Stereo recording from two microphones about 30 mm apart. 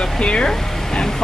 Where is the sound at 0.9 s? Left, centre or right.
Left.